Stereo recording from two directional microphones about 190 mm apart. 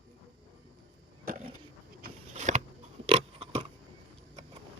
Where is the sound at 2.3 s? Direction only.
40° right (ahead or behind).